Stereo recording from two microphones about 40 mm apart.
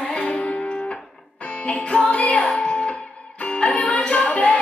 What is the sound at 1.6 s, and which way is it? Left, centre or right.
Female singing, left.